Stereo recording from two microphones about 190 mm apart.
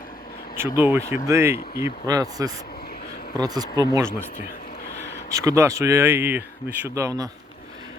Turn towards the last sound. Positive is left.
turn(degrees=-15)  # may be behind; listen again after turning